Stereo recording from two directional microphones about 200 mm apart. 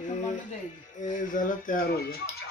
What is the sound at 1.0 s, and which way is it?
Speech, 40° left (ahead or behind).